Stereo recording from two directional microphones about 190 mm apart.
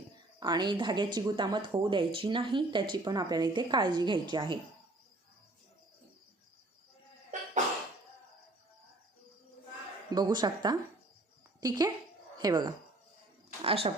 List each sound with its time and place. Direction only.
0.3 s speech: 20° right (ahead or behind)
10.1 s speech: 20° right (ahead or behind)
13.6 s speech: 30° right (ahead or behind)